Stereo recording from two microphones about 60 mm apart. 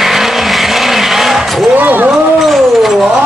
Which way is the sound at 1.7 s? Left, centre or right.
Right.